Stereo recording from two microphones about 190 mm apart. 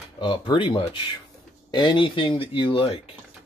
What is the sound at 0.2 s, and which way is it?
Speech, 25° left (ahead or behind).